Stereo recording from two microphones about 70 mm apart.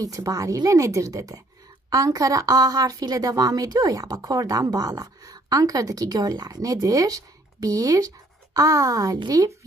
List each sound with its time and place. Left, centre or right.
0.0 s speech: right